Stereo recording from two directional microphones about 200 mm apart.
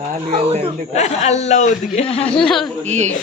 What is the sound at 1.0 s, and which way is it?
Speech, 35° left (ahead or behind).